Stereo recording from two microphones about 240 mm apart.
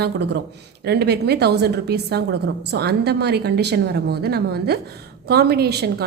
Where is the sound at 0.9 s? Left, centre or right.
Right.